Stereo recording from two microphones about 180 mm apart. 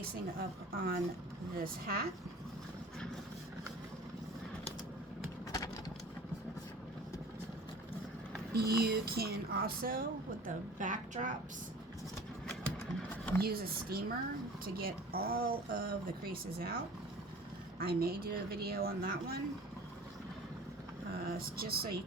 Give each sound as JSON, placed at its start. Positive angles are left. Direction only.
{"t": 0.0, "sound": "speech", "side_deg": -55}
{"t": 8.5, "sound": "speech", "side_deg": -60}
{"t": 13.4, "sound": "speech", "side_deg": -60}
{"t": 17.7, "sound": "speech", "side_deg": -55}
{"t": 21.2, "sound": "speech", "side_deg": -55}